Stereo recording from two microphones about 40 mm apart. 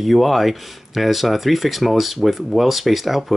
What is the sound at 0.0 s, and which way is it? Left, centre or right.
Speech, centre.